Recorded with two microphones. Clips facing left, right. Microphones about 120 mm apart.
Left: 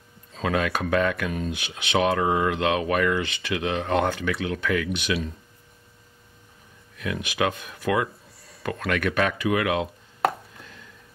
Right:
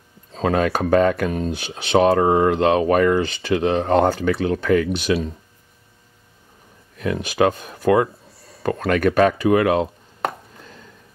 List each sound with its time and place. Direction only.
0.3 s speech: 35° right (ahead or behind)
7.0 s speech: 40° right (ahead or behind)
10.6 s a sound: 35° right (ahead or behind)